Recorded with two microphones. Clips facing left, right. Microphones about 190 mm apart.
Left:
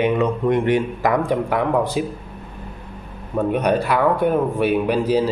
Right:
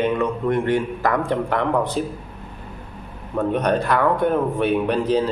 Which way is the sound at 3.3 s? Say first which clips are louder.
Left 1 dB; 10° left (ahead or behind).